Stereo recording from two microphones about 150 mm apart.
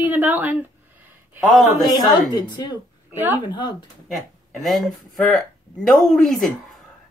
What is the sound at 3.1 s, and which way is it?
Speech, 15° right (ahead or behind).